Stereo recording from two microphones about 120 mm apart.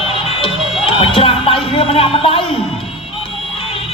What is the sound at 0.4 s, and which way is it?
Music, 50° left (ahead or behind).